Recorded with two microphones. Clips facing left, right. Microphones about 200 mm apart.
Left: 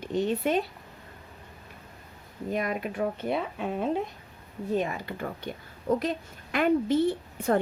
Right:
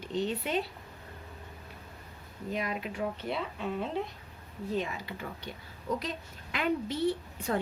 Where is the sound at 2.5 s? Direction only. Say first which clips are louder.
Left 5 dB; 50° left (ahead or behind).